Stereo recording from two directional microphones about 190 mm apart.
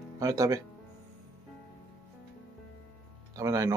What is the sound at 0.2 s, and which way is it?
Speech, 15° right (ahead or behind).